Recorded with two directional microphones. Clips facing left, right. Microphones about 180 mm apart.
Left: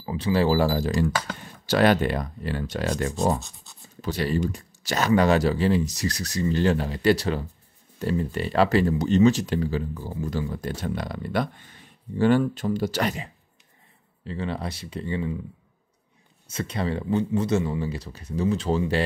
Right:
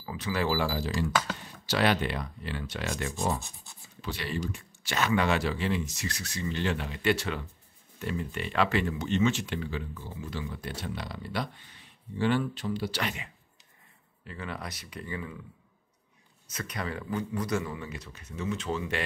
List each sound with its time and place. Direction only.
0.0 s speech: 30° left (ahead or behind)
14.2 s speech: 30° left (ahead or behind)
16.4 s speech: 30° left (ahead or behind)